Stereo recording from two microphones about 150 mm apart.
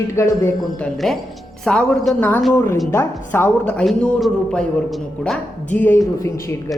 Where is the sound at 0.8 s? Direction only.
Centre (ahead or behind).